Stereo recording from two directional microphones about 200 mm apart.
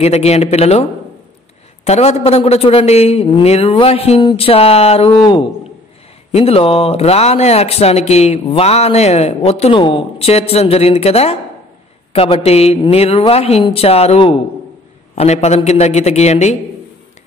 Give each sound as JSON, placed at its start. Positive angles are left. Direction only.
{"t": 0.0, "sound": "speech", "side_deg": 30}
{"t": 1.9, "sound": "a man's voice", "side_deg": 30}